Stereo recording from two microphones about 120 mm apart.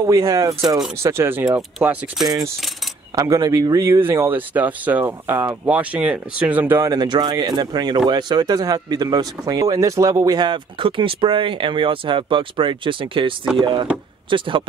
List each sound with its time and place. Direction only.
0.0 s speech: 25° right (ahead or behind)
2.2 s speech: 30° right (ahead or behind); by 6.9 s 15° right (ahead or behind)
6.9 s speech: 35° right (ahead or behind)